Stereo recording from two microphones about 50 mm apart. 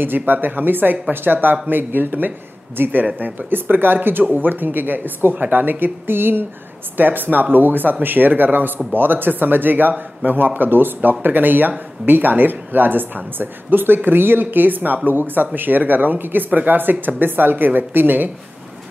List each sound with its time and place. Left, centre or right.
0.0 s speech: right